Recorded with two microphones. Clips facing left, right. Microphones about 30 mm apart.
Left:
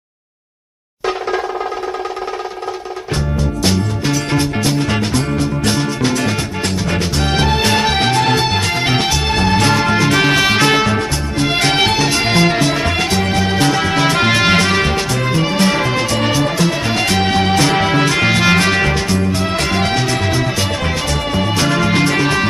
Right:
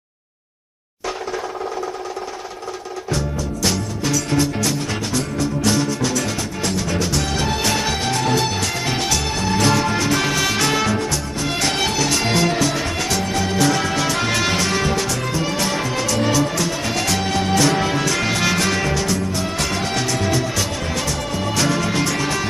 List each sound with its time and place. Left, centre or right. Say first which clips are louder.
3.6 s music: left 3 dB; left
4.3 s music: left 3 dB; left
9.7 s music: left 5 dB; left
10.1 s music: left 6 dB; left
18.6 s music: left 5 dB; left